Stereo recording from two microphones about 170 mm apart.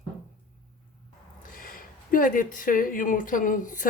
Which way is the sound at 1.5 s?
55° left (ahead or behind).